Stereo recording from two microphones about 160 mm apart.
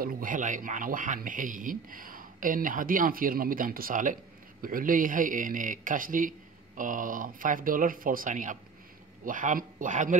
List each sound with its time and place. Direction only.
0.0 s speech: 60° right (ahead or behind)